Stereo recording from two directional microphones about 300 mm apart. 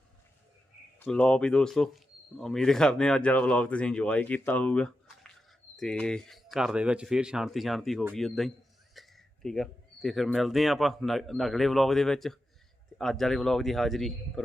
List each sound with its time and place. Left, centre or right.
0.9 s speech: centre